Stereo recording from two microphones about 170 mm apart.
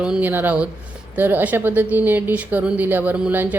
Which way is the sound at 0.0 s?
10° right (ahead or behind).